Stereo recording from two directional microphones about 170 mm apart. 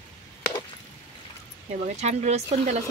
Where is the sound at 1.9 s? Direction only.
40° right (ahead or behind).